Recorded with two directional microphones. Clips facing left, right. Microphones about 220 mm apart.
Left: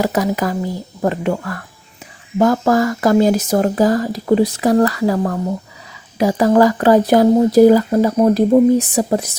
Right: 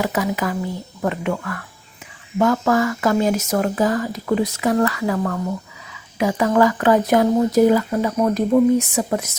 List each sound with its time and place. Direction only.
0.0 s speech: 40° left (ahead or behind)